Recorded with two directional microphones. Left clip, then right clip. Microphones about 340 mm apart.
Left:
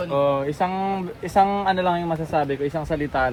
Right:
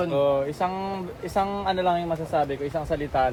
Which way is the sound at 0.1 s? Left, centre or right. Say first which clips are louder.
Left 2 dB; left.